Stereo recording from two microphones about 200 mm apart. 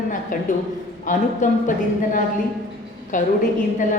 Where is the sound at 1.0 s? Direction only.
40° left (ahead or behind).